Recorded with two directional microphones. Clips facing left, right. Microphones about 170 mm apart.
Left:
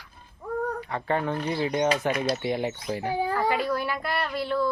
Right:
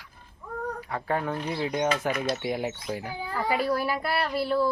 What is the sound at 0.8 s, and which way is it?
Speech, 5° right (ahead or behind).